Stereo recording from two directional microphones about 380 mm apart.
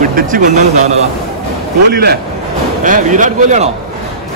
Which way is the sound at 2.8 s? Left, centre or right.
Centre.